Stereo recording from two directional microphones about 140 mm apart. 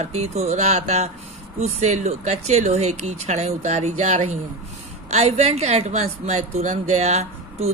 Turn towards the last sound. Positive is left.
turn(degrees=-50)  # may be behind; listen again after turning